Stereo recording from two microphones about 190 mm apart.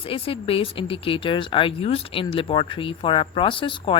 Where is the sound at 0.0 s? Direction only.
30° left (ahead or behind).